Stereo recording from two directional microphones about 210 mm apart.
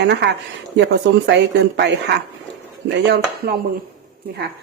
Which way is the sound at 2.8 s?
55° right (ahead or behind).